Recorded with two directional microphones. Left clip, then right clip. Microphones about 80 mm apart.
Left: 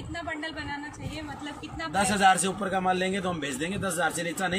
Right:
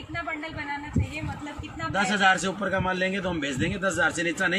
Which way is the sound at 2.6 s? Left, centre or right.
Left.